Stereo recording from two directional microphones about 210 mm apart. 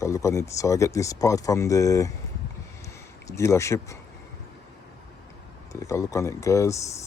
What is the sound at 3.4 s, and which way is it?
Speech, 15° left (ahead or behind).